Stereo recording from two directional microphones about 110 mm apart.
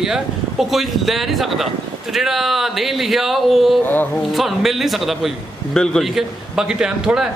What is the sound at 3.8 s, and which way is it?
Speech, 15° left (ahead or behind).